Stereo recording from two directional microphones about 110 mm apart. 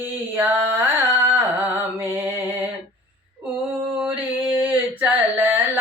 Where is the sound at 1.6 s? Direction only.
15° right (ahead or behind).